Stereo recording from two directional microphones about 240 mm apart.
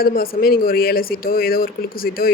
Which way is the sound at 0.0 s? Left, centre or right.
Left.